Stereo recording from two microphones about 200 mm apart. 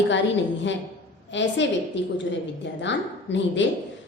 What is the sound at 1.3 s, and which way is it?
A woman's voice, 65° left (ahead or behind).